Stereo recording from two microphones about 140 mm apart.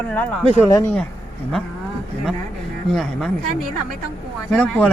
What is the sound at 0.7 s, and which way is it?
Speech, 20° left (ahead or behind).